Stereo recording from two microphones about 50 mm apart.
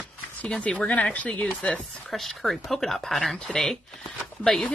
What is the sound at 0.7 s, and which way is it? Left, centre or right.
Speech, left.